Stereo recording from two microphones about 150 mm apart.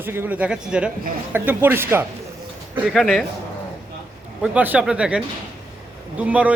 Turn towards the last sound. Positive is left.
turn(degrees=-10)  # may be behind; listen again after turning